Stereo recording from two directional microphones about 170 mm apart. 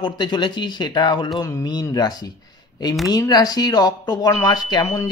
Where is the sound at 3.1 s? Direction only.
20° left (ahead or behind).